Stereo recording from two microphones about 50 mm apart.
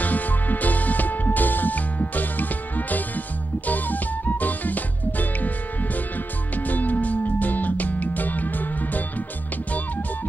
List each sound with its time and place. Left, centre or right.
0.0 s music: left
6.5 s music: left